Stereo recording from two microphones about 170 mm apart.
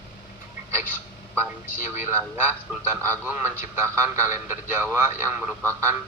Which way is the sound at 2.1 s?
15° right (ahead or behind).